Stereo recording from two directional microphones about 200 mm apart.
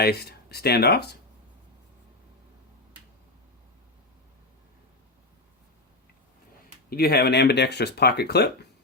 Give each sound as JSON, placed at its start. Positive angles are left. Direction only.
{"t": 0.0, "sound": "speech", "side_deg": 50}
{"t": 6.9, "sound": "speech", "side_deg": 50}